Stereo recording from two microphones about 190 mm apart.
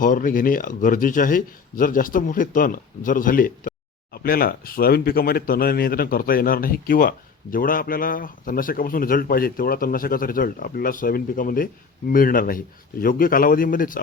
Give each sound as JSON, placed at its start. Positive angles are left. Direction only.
{"t": 0.0, "sound": "speech", "side_deg": 45}